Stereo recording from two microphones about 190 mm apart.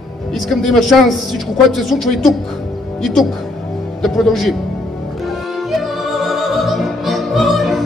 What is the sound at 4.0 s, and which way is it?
Speech, centre (ahead or behind).